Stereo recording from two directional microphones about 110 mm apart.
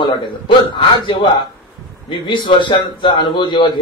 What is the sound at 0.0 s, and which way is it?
A man's voice, 45° left (ahead or behind).